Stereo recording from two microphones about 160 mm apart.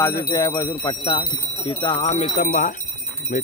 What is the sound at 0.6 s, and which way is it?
Speech, 30° left (ahead or behind).